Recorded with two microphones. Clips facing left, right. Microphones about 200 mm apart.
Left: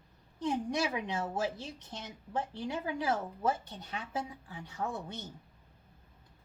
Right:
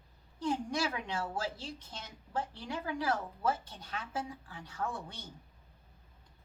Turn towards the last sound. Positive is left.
turn(degrees=20)  # may be behind; listen again after turning